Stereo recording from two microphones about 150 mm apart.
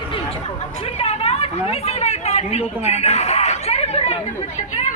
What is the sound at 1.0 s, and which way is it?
Chatter, 40° left (ahead or behind).